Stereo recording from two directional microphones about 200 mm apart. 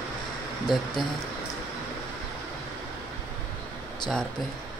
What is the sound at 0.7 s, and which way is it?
Speech, centre (ahead or behind).